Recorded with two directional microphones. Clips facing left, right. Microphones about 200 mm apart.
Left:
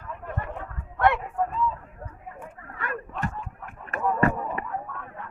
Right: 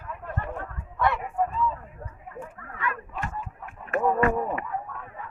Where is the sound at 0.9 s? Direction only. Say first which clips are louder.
Left 2 dB; 60° left (ahead or behind).